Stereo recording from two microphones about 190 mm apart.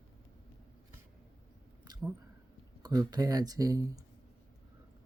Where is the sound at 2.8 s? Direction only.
20° right (ahead or behind).